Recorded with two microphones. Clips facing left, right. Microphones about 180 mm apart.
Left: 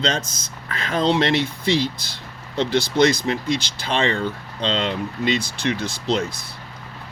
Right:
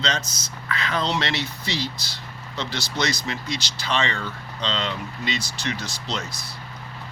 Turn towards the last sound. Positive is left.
turn(degrees=55)  # may be behind; listen again after turning